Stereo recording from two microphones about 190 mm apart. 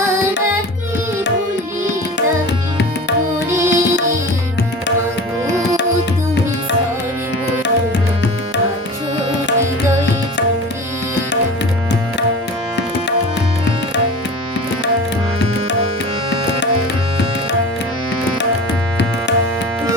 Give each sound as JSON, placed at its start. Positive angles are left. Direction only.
{"t": 3.5, "sound": "music", "side_deg": -15}